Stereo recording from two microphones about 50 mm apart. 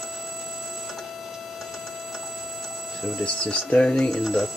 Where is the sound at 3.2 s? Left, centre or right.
Left.